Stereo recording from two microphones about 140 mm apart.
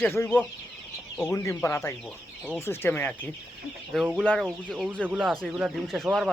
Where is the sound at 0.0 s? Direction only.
15° left (ahead or behind).